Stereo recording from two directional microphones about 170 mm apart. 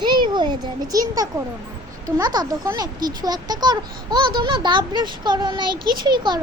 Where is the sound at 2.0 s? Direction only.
25° right (ahead or behind).